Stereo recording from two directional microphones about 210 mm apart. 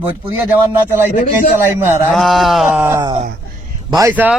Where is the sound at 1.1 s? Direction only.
35° left (ahead or behind).